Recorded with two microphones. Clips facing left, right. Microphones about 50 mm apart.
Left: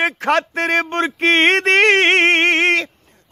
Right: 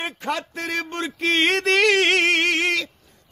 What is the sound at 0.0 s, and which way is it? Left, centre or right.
Speech, left.